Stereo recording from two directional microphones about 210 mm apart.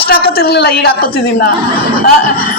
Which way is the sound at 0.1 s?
50° left (ahead or behind).